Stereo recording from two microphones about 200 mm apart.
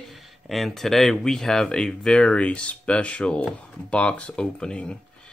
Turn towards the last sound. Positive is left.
turn(degrees=5)  # may be behind; listen again after turning